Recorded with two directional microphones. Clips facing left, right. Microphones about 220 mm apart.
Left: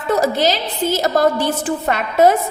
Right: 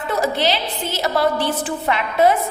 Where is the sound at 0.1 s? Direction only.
45° left (ahead or behind).